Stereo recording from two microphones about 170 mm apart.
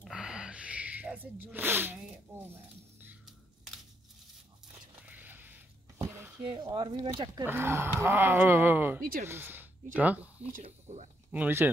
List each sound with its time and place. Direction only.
0.0 s sneeze: 5° right (ahead or behind)
3.0 s a sound: 5° right (ahead or behind)
5.0 s a sound: 10° right (ahead or behind)
6.4 s speech: 25° right (ahead or behind)
7.4 s speech: 15° right (ahead or behind)
10.6 s speech: 45° right (ahead or behind)
11.3 s speech: 10° right (ahead or behind)